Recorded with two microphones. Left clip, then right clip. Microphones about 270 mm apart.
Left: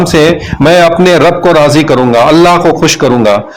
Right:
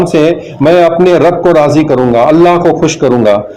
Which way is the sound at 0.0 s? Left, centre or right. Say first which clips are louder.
Left 2 dB; left.